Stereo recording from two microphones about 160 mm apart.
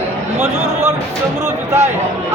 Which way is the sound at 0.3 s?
15° right (ahead or behind).